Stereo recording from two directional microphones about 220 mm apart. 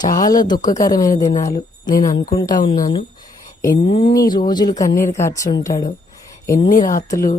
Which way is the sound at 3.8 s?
25° left (ahead or behind).